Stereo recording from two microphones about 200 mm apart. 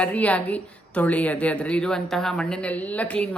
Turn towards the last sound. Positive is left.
turn(degrees=5)  # may be behind; listen again after turning